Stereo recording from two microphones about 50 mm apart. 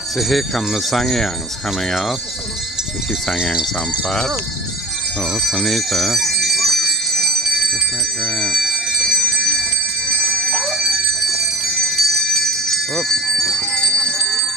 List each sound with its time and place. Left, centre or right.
0.2 s speech: centre
3.3 s speech: centre
5.3 s bell: centre
10.3 s bell: centre
10.6 s bell: centre